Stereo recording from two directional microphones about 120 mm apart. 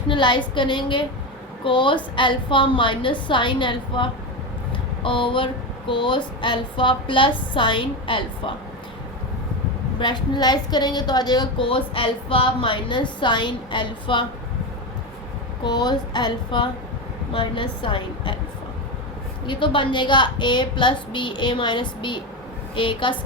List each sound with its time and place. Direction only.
0.1 s a woman's voice: 40° left (ahead or behind)
4.7 s a sound: 45° left (ahead or behind)
5.9 s a woman's voice: 45° left (ahead or behind)
10.0 s a woman's voice: 40° left (ahead or behind)
15.6 s a woman's voice: 35° left (ahead or behind)
19.5 s a woman's voice: 45° left (ahead or behind)